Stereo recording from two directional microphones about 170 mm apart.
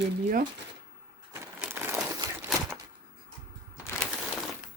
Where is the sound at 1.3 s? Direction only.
10° right (ahead or behind).